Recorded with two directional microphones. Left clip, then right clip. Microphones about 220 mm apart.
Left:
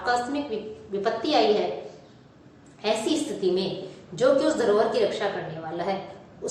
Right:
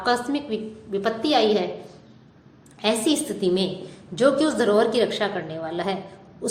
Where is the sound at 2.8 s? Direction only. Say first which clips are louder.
Right 3 dB; 55° right (ahead or behind).